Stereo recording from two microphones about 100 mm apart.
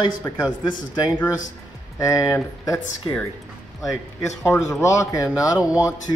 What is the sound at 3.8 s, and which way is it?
Speech, 30° left (ahead or behind).